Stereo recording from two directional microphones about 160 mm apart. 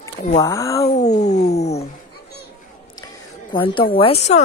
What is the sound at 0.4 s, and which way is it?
Speech, 20° left (ahead or behind).